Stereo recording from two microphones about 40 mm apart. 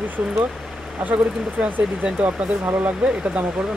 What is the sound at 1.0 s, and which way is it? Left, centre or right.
Speech, right.